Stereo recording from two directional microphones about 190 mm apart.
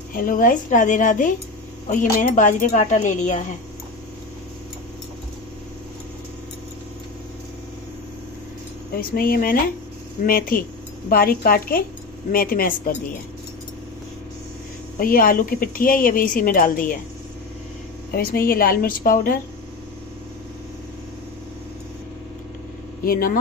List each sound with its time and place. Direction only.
0.1 s speech: 45° left (ahead or behind)
8.9 s speech: 50° left (ahead or behind)
15.0 s speech: 50° left (ahead or behind)
18.1 s speech: 55° left (ahead or behind)
23.0 s speech: 50° left (ahead or behind)